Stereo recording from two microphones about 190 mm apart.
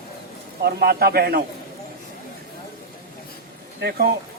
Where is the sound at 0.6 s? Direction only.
55° right (ahead or behind).